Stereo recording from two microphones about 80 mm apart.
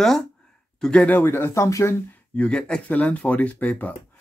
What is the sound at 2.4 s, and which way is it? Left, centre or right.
Speech, centre.